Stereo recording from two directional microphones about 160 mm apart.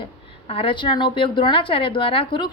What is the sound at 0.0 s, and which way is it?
A woman's voice, 35° left (ahead or behind).